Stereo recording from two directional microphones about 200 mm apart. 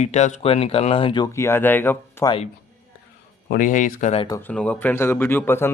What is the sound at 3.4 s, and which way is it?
Speech, 45° left (ahead or behind).